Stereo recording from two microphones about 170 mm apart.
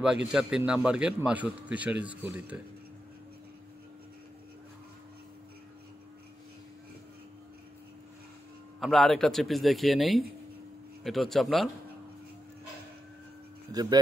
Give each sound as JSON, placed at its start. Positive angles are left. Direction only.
{"t": 0.3, "sound": "a man's voice", "side_deg": -5}
{"t": 8.7, "sound": "speech", "side_deg": 0}
{"t": 13.7, "sound": "speech", "side_deg": -25}